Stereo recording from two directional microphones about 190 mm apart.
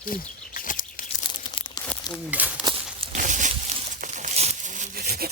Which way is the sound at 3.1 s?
40° right (ahead or behind).